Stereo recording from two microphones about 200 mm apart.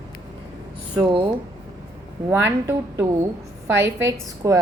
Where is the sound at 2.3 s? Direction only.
15° right (ahead or behind).